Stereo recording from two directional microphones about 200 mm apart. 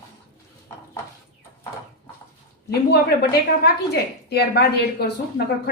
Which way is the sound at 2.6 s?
55° left (ahead or behind).